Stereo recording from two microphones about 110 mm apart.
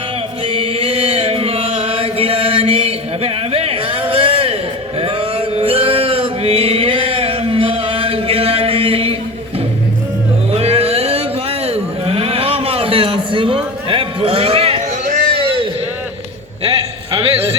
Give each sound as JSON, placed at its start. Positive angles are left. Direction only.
{"t": 0.4, "sound": "chant", "side_deg": -55}
{"t": 5.5, "sound": "male singing", "side_deg": -60}
{"t": 10.5, "sound": "music", "side_deg": -70}
{"t": 11.6, "sound": "a sound", "side_deg": -65}